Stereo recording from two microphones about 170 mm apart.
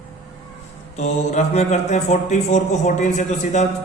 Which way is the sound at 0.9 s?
40° left (ahead or behind).